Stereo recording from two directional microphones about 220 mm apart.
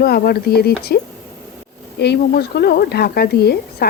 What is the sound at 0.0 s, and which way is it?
Speech, 45° left (ahead or behind).